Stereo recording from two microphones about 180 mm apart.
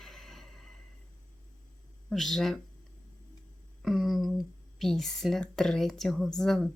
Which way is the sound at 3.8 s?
Centre (ahead or behind).